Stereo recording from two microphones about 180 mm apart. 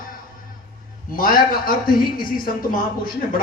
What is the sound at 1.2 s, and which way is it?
Speech, 55° left (ahead or behind).